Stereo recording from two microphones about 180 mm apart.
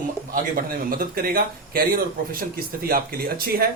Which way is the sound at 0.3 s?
55° right (ahead or behind).